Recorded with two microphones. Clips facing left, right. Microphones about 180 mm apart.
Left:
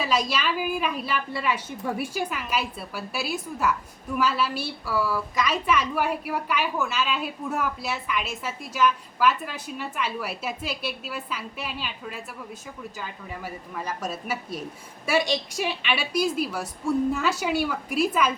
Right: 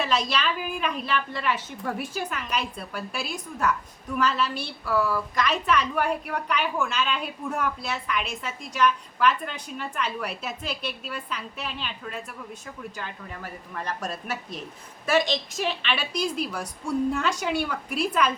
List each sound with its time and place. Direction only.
0.0 s a woman's voice: 10° left (ahead or behind)